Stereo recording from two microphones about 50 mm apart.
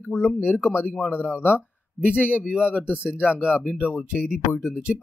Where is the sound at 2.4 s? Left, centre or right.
Right.